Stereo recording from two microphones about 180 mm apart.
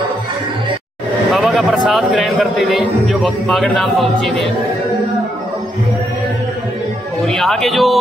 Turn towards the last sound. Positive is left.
turn(degrees=0)  # may be behind; listen again after turning